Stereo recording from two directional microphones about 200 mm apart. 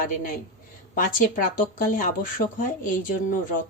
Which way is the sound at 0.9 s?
40° left (ahead or behind).